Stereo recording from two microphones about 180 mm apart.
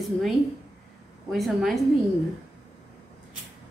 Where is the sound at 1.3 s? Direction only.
Centre (ahead or behind).